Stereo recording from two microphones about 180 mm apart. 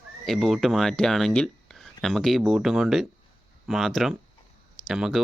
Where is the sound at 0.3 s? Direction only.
Centre (ahead or behind).